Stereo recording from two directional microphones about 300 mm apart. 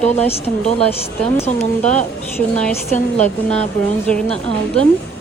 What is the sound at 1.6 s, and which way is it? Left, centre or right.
Speech, left.